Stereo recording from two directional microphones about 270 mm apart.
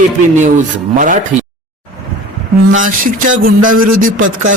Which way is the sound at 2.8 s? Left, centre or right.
Right.